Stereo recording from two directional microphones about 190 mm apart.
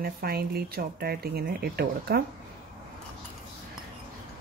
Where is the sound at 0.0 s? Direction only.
50° right (ahead or behind).